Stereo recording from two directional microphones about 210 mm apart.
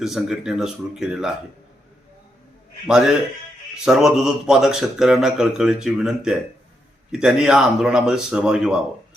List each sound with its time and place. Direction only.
0.0 s speech: centre (ahead or behind)
2.8 s speech: centre (ahead or behind)